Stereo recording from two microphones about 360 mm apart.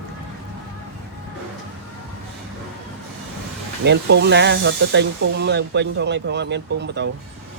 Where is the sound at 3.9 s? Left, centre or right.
Right.